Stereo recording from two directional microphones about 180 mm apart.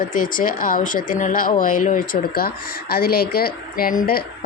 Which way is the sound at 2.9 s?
55° left (ahead or behind).